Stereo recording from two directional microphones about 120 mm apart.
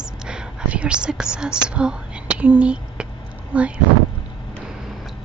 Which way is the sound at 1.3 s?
5° right (ahead or behind).